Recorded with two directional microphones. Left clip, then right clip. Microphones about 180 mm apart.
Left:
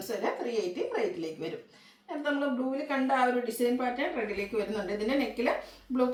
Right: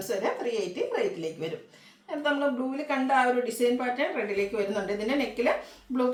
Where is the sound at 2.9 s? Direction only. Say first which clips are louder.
Right 4 dB; 15° right (ahead or behind).